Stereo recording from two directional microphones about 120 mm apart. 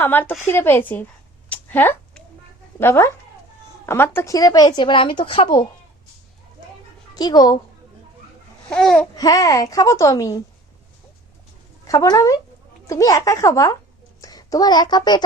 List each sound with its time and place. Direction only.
0.0 s speech: 15° left (ahead or behind)
1.5 s a sound: 15° left (ahead or behind)
2.7 s a woman's voice: 20° left (ahead or behind); by 5.6 s 45° left (ahead or behind)
7.1 s a child's voice: 35° left (ahead or behind)
8.7 s babbling: 5° left (ahead or behind)
9.1 s a woman's voice: 30° left (ahead or behind)
11.9 s a woman's voice: 30° left (ahead or behind)